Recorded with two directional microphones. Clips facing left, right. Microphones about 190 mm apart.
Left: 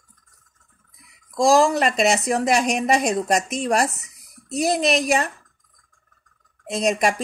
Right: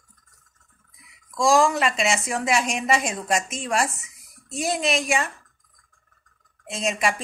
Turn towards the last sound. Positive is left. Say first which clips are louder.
# left 5 dB
turn(degrees=40)  # may be behind; listen again after turning